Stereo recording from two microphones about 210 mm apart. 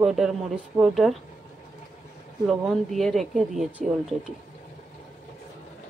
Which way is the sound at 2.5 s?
Centre (ahead or behind).